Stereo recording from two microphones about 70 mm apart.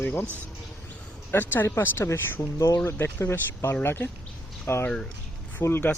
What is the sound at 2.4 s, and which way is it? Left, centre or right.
Speech, left.